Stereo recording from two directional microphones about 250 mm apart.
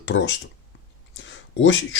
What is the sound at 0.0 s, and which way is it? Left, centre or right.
A man's voice, left.